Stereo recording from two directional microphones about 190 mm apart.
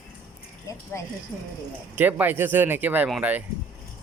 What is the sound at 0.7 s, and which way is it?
Speech, 15° left (ahead or behind).